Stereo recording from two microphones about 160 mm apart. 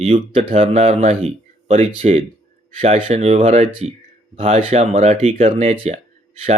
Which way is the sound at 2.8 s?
40° right (ahead or behind).